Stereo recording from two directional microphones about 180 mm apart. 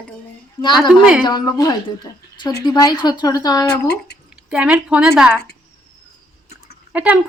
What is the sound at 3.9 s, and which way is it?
Speech, 65° left (ahead or behind).